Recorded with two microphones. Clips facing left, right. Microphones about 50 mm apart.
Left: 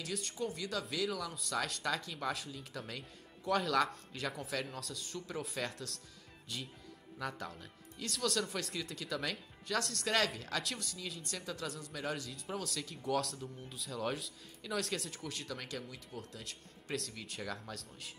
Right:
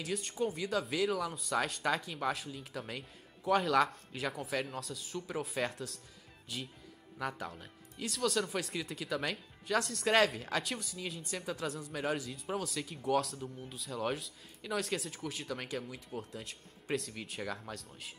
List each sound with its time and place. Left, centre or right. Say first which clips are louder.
0.0 s speech: right 4 dB; centre
10.0 s speech: right 6 dB; centre
11.9 s speech: right 5 dB; centre